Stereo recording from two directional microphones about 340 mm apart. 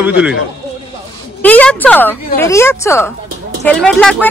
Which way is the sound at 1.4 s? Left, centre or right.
Centre.